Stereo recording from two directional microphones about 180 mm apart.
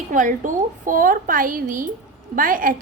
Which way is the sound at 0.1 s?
45° right (ahead or behind).